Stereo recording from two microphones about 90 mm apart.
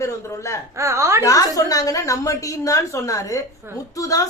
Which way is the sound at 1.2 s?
40° left (ahead or behind).